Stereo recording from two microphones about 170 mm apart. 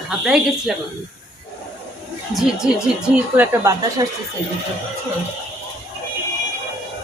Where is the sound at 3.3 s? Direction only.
15° right (ahead or behind).